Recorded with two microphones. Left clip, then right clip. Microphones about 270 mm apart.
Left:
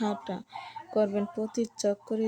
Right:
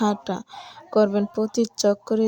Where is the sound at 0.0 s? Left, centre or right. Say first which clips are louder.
Right 8 dB; right.